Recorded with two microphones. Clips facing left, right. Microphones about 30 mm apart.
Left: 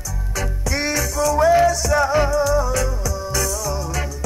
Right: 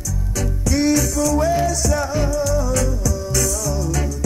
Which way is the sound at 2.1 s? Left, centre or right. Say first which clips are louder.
Left 3 dB; left.